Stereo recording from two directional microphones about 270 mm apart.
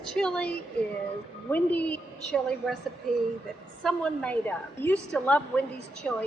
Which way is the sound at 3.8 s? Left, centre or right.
Centre.